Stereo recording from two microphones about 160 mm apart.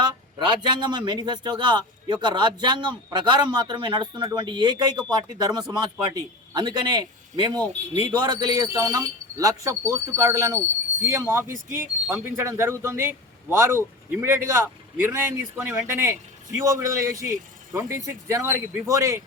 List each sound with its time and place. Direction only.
0.1 s a man's voice: 25° right (ahead or behind)